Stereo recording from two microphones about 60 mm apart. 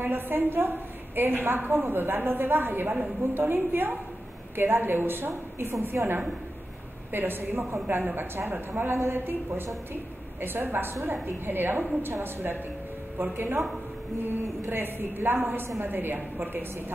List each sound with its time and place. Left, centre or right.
0.0 s a woman's voice: right
14.7 s a woman's voice: right